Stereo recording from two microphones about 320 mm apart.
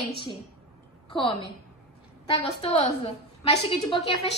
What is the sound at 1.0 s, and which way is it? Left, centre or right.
A woman's voice, centre.